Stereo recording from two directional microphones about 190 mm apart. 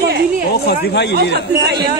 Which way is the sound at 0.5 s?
55° left (ahead or behind).